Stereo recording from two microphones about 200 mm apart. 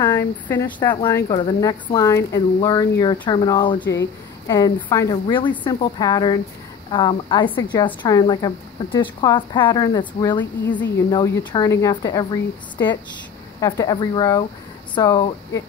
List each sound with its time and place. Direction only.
0.0 s speech: 10° left (ahead or behind)